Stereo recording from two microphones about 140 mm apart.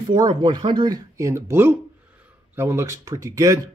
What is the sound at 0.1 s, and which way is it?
Speech, 30° right (ahead or behind).